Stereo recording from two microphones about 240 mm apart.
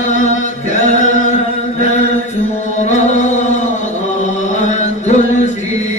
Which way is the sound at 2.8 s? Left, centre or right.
Left.